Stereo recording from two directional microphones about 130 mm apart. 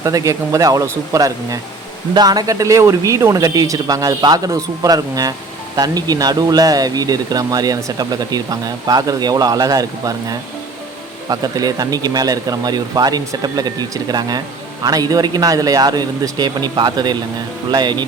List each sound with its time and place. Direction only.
0.0 s speech: 25° right (ahead or behind)